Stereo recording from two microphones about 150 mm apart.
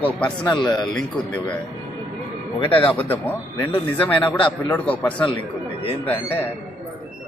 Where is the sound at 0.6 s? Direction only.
25° left (ahead or behind).